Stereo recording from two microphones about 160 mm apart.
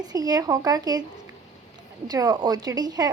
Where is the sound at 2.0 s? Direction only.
25° right (ahead or behind).